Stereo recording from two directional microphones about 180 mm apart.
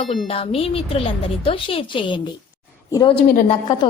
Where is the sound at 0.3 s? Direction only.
30° left (ahead or behind).